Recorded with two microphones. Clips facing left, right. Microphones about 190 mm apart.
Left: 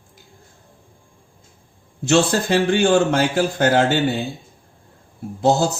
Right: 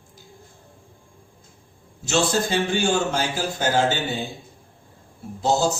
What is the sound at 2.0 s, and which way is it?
A man's voice, 60° left (ahead or behind).